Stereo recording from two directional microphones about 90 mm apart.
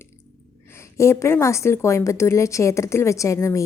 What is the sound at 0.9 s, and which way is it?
A woman's voice, 30° left (ahead or behind).